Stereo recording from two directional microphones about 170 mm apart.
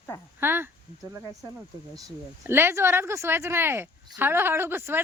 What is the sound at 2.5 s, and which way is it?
Speech, 15° right (ahead or behind).